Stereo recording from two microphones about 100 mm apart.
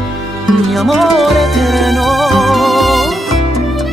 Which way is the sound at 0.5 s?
Centre (ahead or behind).